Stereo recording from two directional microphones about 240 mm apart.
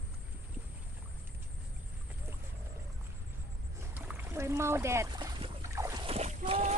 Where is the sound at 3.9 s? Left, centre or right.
Centre.